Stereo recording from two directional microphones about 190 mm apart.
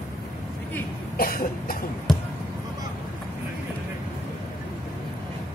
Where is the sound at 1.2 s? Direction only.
50° left (ahead or behind).